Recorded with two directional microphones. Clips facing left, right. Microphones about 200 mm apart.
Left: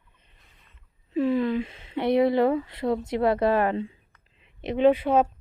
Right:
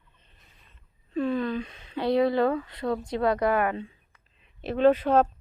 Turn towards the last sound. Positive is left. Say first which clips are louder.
# left 1 dB
turn(degrees=10)  # may be behind; listen again after turning